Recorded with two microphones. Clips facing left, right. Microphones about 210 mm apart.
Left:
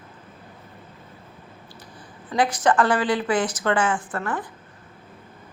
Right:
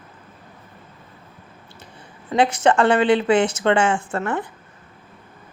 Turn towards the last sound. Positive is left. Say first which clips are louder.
# right 4 dB
turn(degrees=-25)  # may be behind; listen again after turning